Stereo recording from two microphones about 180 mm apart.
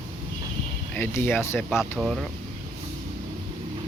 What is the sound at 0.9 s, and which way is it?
Speech, 10° left (ahead or behind).